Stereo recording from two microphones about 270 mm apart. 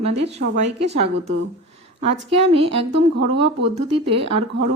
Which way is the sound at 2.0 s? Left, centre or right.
Right.